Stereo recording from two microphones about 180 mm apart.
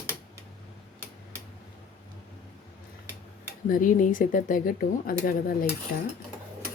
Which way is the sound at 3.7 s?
50° left (ahead or behind).